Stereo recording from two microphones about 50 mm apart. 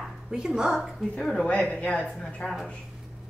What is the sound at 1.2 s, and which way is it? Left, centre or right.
Speech, centre.